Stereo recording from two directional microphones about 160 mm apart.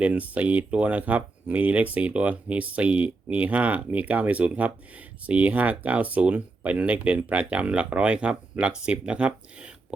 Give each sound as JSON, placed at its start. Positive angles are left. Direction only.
{"t": 0.0, "sound": "speech", "side_deg": -10}